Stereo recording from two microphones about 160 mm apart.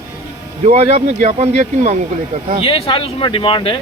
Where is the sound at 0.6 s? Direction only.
40° right (ahead or behind).